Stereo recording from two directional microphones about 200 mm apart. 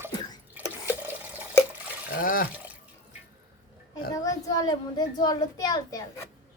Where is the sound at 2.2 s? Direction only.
45° left (ahead or behind).